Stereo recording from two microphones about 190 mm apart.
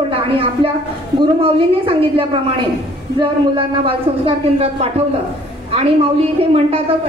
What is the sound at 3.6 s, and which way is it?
A woman's voice, 30° right (ahead or behind).